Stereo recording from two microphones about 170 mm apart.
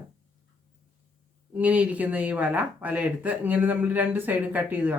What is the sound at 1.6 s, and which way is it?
Speech, 10° right (ahead or behind).